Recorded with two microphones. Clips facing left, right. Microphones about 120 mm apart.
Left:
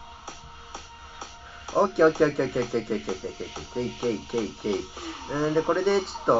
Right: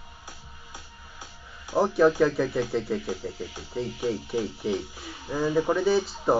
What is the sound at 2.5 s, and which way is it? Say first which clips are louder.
Speech: left 1 dB; 30° left (ahead or behind).